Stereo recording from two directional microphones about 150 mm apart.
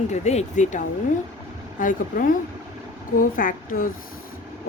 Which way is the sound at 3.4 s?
65° left (ahead or behind).